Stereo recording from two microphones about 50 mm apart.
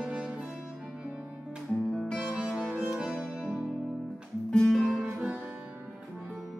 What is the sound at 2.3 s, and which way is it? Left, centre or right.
Music, centre.